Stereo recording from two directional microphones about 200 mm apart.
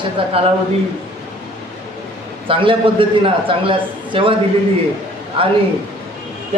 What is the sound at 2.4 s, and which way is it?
A man's voice, 25° right (ahead or behind).